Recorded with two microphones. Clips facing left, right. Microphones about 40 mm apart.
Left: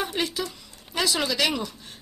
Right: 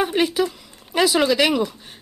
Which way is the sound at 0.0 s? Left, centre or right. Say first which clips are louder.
Right 8 dB; centre.